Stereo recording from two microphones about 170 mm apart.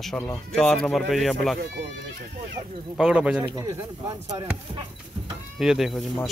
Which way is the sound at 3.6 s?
20° right (ahead or behind).